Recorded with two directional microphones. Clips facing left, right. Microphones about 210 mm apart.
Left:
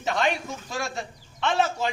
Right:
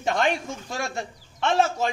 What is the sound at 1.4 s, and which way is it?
Speech, 45° right (ahead or behind).